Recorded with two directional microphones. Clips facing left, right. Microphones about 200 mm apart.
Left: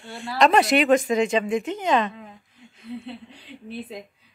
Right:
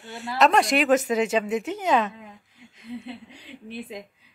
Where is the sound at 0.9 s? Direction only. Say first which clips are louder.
Left 2 dB; 5° right (ahead or behind).